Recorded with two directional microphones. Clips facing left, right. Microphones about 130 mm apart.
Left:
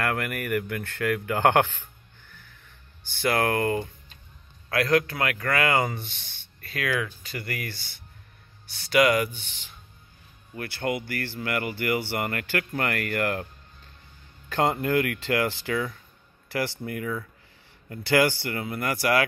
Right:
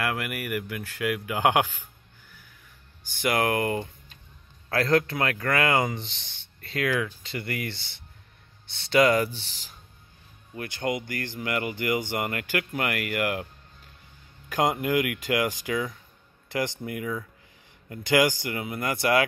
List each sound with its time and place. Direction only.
0.0 s speech: 5° right (ahead or behind)
3.1 s speech: 15° right (ahead or behind); by 9.8 s 35° right (ahead or behind)
10.5 s speech: 20° right (ahead or behind)
14.5 s speech: 10° right (ahead or behind)